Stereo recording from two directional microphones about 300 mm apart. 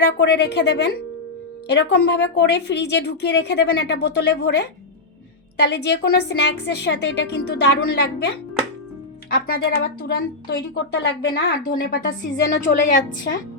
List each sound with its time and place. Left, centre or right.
0.2 s a woman's voice: left
9.3 s a woman's voice: left